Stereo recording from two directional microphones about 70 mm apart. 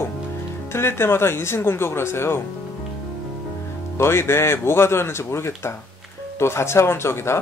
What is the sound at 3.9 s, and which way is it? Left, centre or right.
Speech, left.